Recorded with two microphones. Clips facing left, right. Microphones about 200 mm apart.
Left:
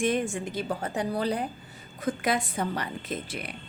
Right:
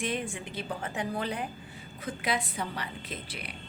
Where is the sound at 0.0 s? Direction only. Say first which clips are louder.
Left 7 dB; 45° left (ahead or behind).